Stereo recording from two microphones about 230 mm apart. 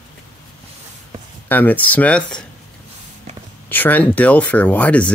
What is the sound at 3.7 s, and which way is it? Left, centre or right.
Speech, centre.